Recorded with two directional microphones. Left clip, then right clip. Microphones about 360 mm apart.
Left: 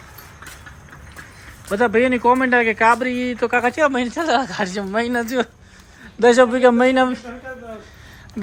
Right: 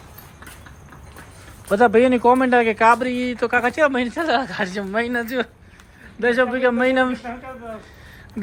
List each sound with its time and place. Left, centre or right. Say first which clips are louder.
1.7 s a man's voice: right 2 dB; centre